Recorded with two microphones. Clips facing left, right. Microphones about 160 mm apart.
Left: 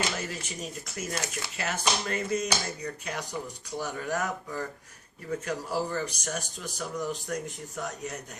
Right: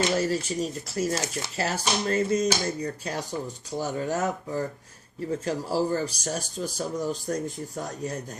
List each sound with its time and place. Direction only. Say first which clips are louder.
0.2 s speech: right 10 dB; 35° right (ahead or behind)